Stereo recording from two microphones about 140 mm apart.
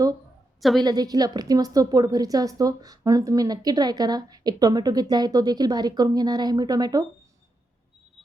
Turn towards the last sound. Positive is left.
turn(degrees=-25)  # may be behind; listen again after turning